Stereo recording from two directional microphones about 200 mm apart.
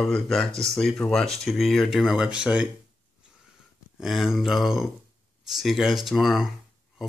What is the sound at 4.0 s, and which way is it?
Speech, centre (ahead or behind).